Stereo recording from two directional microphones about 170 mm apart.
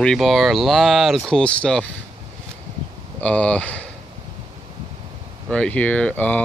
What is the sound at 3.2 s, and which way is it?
Speech, 5° left (ahead or behind).